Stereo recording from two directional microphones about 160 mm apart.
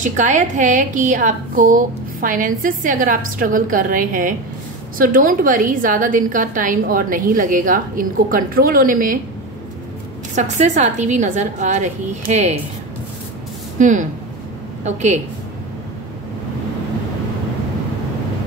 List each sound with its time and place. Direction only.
0.0 s a woman's voice: 50° right (ahead or behind)
10.3 s a woman's voice: 50° right (ahead or behind)
13.7 s a woman's voice: 50° right (ahead or behind)